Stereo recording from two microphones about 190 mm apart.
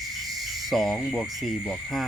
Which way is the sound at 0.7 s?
Centre (ahead or behind).